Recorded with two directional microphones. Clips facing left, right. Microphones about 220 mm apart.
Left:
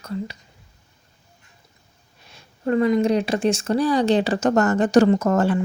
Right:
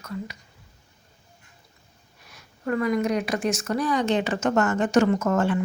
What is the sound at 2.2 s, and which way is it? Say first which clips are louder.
Speech: left 5 dB; 25° left (ahead or behind).